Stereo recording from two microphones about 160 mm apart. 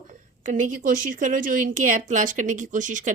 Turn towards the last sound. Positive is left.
turn(degrees=-55)  # may be behind; listen again after turning